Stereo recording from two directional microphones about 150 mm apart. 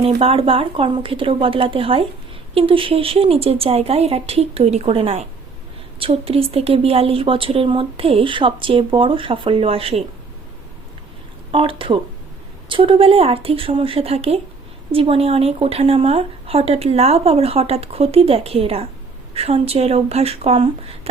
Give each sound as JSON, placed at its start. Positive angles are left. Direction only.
{"t": 0.0, "sound": "a woman's voice", "side_deg": -40}
{"t": 11.5, "sound": "a woman's voice", "side_deg": -35}